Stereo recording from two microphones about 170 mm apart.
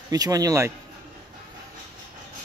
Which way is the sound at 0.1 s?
20° right (ahead or behind).